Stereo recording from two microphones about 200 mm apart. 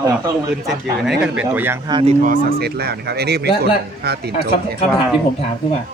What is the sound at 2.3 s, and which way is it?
Speech, 55° right (ahead or behind).